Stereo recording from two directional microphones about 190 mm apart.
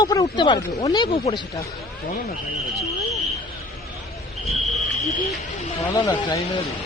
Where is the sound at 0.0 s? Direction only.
20° left (ahead or behind).